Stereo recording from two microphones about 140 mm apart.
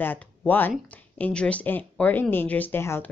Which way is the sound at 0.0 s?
10° left (ahead or behind).